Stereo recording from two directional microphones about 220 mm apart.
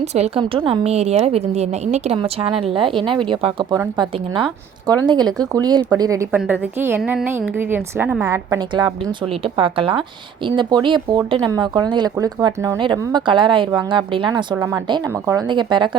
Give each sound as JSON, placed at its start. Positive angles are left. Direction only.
{"t": 0.0, "sound": "a woman's voice", "side_deg": -30}